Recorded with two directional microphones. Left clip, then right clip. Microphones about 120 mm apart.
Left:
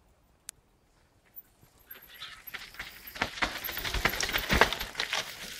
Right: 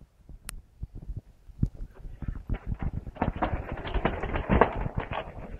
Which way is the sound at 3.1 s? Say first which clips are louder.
Right 1 dB; 45° left (ahead or behind).